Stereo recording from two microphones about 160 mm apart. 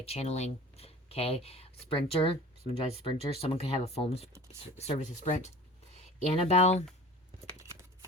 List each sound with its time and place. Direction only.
0.0 s speech: 40° left (ahead or behind)